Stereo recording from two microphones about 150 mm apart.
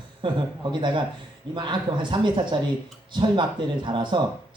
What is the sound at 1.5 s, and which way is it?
Speech, 30° right (ahead or behind).